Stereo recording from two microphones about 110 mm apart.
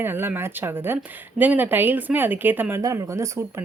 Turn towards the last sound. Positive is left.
turn(degrees=-30)  # may be behind; listen again after turning